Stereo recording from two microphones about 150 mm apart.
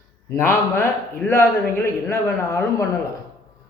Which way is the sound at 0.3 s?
15° left (ahead or behind).